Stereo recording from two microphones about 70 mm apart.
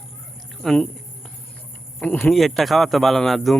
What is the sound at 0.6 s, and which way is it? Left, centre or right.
Speech, centre.